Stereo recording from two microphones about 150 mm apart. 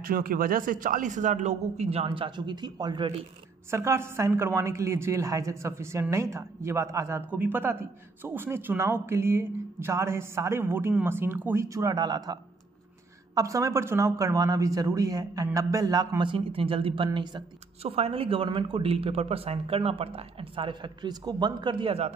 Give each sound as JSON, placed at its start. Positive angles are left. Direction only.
{"t": 0.0, "sound": "a man's voice", "side_deg": -75}
{"t": 3.7, "sound": "speech", "side_deg": -20}